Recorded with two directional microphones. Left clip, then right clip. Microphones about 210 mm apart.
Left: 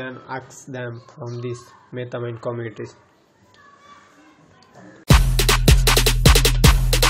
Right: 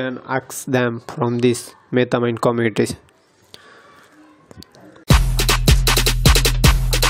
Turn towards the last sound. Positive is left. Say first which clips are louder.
# even
turn(degrees=0)  # may be behind; listen again after turning